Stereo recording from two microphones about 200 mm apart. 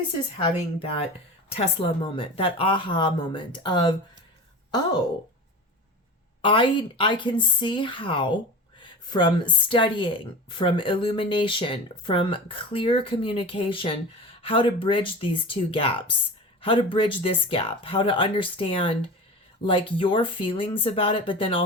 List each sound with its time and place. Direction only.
0.3 s a woman's voice: 25° left (ahead or behind)
6.4 s a woman's voice: 25° left (ahead or behind)